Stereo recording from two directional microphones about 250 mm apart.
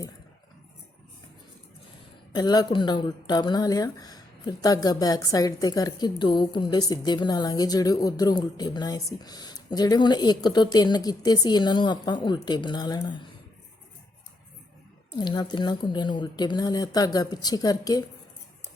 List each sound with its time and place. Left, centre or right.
2.3 s speech: centre
15.2 s speech: centre